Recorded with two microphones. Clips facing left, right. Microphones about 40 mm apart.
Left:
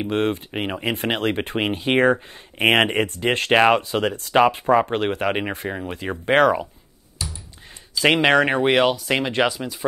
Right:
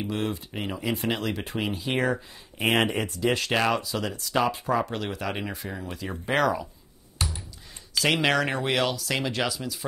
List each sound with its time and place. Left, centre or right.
0.0 s speech: left
7.2 s a sound: right
8.0 s speech: left